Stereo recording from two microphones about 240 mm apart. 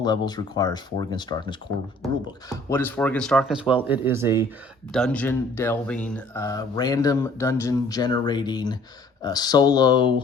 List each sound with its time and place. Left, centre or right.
0.0 s speech: centre
4.9 s speech: centre